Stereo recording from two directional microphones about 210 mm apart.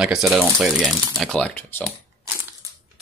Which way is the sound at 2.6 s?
15° right (ahead or behind).